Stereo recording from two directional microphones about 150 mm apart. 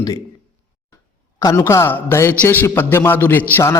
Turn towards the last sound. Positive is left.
turn(degrees=20)  # may be behind; listen again after turning